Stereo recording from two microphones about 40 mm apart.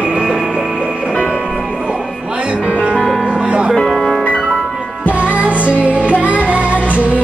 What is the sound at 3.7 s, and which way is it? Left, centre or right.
Music, centre.